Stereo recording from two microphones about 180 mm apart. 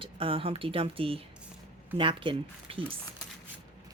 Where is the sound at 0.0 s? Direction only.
30° right (ahead or behind).